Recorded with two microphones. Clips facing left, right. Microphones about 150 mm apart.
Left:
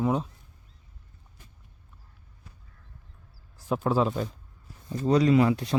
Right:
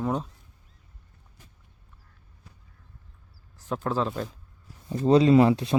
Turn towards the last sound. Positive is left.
turn(degrees=-25)  # may be behind; listen again after turning